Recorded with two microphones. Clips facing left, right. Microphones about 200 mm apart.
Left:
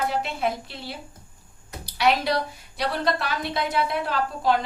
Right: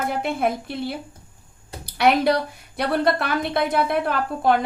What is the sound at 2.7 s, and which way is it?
A woman's voice, 55° right (ahead or behind).